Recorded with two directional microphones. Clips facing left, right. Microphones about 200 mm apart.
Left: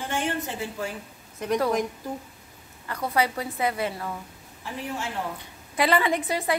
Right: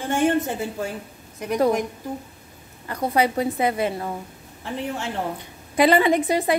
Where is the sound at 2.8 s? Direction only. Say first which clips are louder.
Right 4 dB; 20° right (ahead or behind).